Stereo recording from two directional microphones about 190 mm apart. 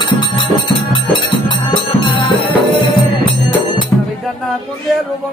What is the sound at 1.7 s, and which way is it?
Music, 25° left (ahead or behind).